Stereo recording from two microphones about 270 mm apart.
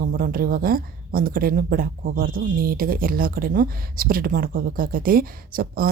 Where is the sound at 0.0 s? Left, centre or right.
Right.